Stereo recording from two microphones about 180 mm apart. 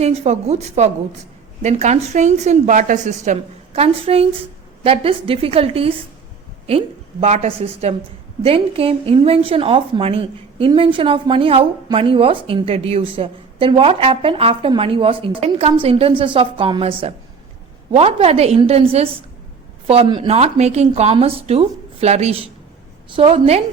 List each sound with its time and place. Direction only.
0.0 s a woman's voice: 35° right (ahead or behind)